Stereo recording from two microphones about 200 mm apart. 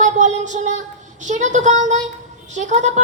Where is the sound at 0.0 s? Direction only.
35° right (ahead or behind).